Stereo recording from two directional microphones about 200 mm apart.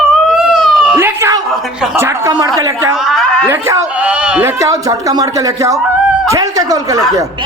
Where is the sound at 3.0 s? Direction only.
Centre (ahead or behind).